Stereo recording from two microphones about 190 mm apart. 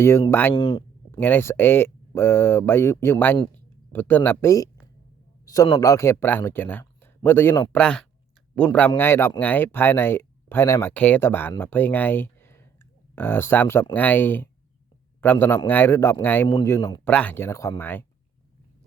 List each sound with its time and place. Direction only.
0.0 s speech: 15° left (ahead or behind)
0.5 s a sound: 25° left (ahead or behind)
1.2 s speech: 10° left (ahead or behind)